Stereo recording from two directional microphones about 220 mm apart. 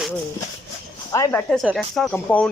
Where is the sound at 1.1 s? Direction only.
15° left (ahead or behind).